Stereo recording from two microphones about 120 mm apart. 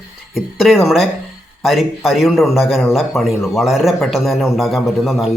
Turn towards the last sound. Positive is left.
turn(degrees=0)  # may be behind; listen again after turning